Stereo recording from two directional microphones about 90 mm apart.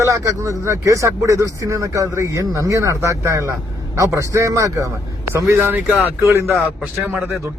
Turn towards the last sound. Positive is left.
turn(degrees=-25)  # may be behind; listen again after turning